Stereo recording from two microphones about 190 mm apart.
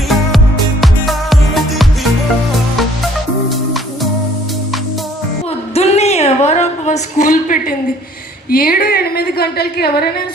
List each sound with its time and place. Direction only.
0.1 s music: centre (ahead or behind)
5.7 s a sound: 35° left (ahead or behind)
8.4 s a woman's voice: 50° left (ahead or behind)